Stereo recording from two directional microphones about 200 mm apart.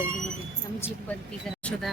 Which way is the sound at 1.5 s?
5° left (ahead or behind).